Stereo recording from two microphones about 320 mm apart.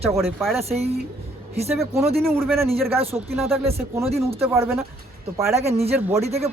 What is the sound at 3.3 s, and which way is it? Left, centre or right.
Speech, centre.